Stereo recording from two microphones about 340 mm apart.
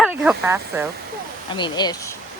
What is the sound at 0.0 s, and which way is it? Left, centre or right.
Speech, centre.